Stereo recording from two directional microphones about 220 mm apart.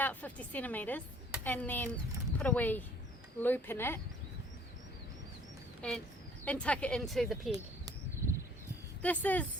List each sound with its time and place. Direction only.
0.0 s a woman's voice: 5° left (ahead or behind)
5.8 s speech: 5° left (ahead or behind)
7.5 s bird: 15° right (ahead or behind)
9.0 s a woman's voice: 5° left (ahead or behind)